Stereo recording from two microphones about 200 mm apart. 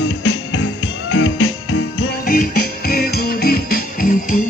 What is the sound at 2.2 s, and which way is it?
Music, 45° left (ahead or behind).